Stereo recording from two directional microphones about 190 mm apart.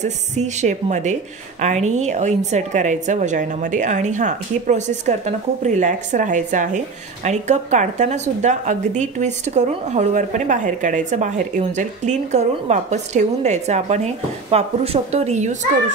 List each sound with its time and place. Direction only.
0.0 s speech: 40° right (ahead or behind)